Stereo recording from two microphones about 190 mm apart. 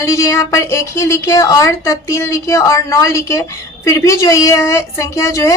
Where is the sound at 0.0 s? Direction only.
15° left (ahead or behind).